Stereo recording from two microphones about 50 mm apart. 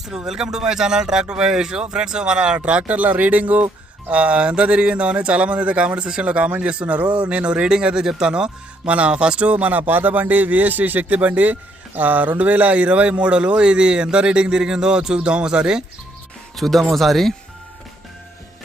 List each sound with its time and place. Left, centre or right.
0.3 s a man's voice: centre
16.6 s speech: centre